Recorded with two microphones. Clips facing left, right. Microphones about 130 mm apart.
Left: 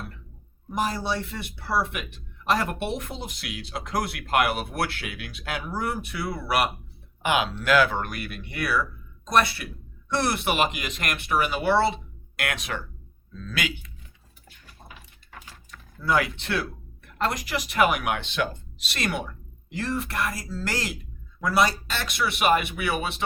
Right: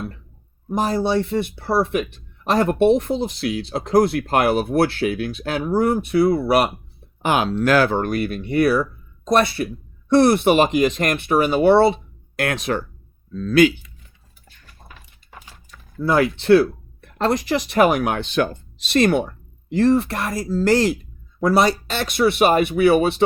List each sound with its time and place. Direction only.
1.0 s speech: 30° right (ahead or behind)
14.8 s a sound: 15° left (ahead or behind)
15.3 s horse: 10° right (ahead or behind)
16.0 s speech: 35° right (ahead or behind)